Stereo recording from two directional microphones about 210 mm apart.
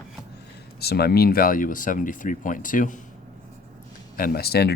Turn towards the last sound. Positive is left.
turn(degrees=50)  # may be behind; listen again after turning